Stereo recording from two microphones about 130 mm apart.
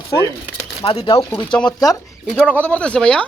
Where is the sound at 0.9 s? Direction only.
45° left (ahead or behind).